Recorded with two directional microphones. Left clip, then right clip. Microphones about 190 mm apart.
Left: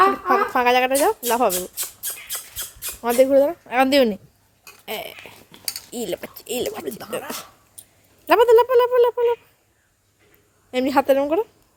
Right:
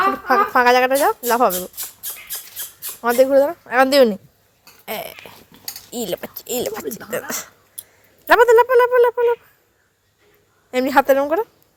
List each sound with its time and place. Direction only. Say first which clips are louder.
0.3 s speech: right 4 dB; centre (ahead or behind)
3.0 s speech: right 2 dB; centre (ahead or behind)
10.7 s speech: right 3 dB; centre (ahead or behind)